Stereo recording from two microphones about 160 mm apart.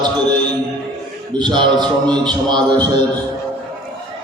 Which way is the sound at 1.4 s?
30° right (ahead or behind).